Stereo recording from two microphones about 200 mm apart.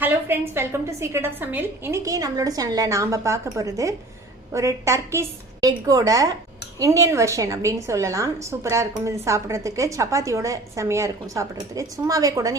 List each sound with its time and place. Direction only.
0.0 s a woman's voice: 10° right (ahead or behind)